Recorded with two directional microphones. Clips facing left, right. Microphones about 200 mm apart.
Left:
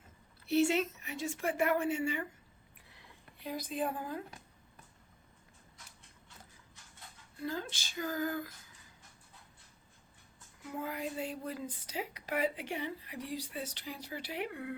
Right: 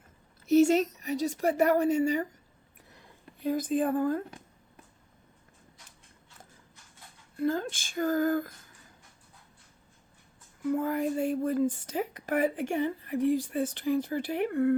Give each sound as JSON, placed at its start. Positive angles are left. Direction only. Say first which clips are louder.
{"t": 0.4, "sound": "a woman's voice", "louder": "right 8 dB", "side_deg": -40}
{"t": 3.4, "sound": "speech", "louder": "right 9 dB", "side_deg": -45}
{"t": 7.3, "sound": "speech", "louder": "right 10 dB", "side_deg": -50}
{"t": 10.7, "sound": "speech", "louder": "right 11 dB", "side_deg": -50}